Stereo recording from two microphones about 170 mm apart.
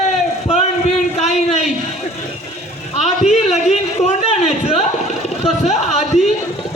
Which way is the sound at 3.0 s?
40° left (ahead or behind).